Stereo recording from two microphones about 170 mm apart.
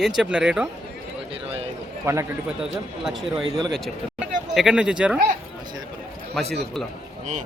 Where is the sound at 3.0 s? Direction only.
Centre (ahead or behind).